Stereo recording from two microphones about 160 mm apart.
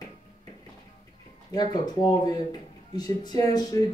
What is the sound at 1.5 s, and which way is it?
Speech, 25° left (ahead or behind).